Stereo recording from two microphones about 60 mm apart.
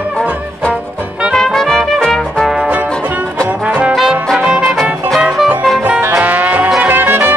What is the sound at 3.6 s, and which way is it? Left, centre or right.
Trombone, centre.